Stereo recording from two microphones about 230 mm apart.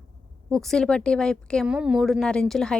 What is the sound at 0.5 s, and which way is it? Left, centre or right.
A woman's voice, centre.